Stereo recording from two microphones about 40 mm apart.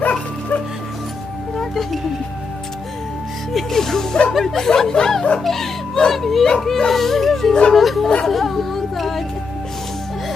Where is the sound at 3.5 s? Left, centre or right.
Centre.